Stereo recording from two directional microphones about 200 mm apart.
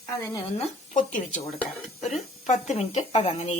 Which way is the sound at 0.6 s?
40° left (ahead or behind).